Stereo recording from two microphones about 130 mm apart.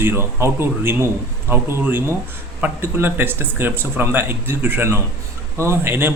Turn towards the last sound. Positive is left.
turn(degrees=-15)  # may be behind; listen again after turning